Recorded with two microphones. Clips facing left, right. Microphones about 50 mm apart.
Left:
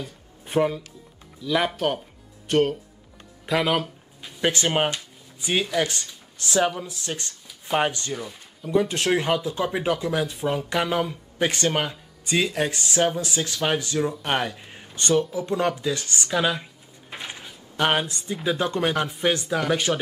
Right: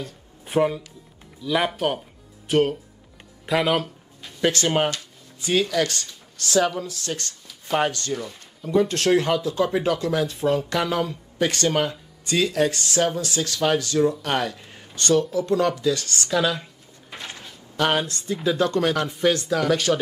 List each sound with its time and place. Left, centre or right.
0.0 s music: centre
1.4 s speech: centre
8.1 s speech: centre